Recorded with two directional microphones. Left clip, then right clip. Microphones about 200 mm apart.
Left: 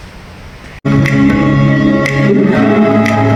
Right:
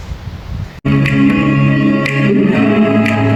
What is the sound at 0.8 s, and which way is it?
Music, 20° left (ahead or behind).